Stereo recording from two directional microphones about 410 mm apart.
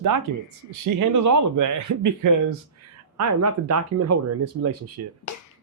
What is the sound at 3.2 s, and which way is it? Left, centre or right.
Speech, right.